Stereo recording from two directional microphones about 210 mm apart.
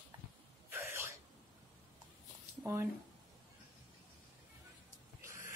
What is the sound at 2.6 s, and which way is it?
Speech, 15° right (ahead or behind).